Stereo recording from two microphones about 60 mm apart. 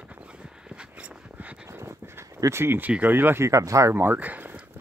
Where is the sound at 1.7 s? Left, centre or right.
Right.